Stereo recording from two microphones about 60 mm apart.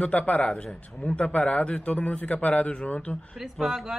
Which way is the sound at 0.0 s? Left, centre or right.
Left.